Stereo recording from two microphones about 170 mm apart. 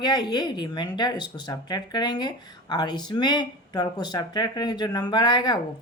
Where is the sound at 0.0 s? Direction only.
25° left (ahead or behind).